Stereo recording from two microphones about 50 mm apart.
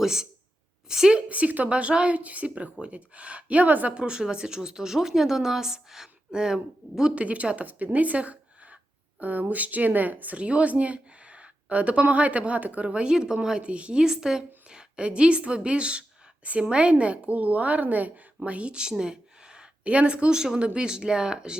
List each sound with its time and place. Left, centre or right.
0.0 s speech: centre
1.3 s a woman's voice: right
3.9 s speech: centre
7.2 s a sound: right
9.2 s speech: right
10.3 s a woman's voice: right
14.0 s a woman's voice: centre